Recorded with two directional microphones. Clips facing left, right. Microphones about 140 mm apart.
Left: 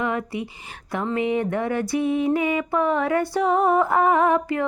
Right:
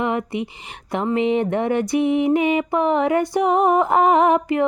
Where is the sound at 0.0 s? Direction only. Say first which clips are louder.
Right 3 dB; 20° right (ahead or behind).